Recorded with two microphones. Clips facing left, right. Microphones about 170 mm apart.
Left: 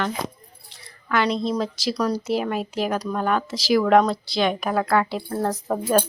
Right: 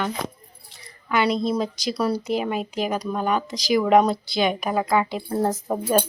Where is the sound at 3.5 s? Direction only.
5° left (ahead or behind); by 6.0 s 15° right (ahead or behind).